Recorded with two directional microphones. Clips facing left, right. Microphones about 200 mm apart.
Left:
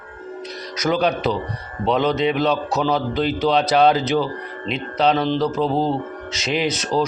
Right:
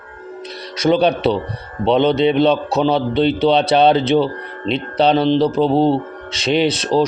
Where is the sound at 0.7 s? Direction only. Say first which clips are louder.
Right 5 dB; 30° right (ahead or behind).